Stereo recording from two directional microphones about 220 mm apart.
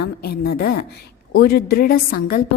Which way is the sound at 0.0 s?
45° left (ahead or behind).